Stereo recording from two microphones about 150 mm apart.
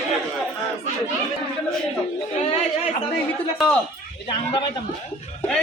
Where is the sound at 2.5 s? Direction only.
45° left (ahead or behind).